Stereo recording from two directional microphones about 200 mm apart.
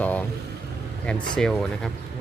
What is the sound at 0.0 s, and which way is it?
Speech, 10° left (ahead or behind).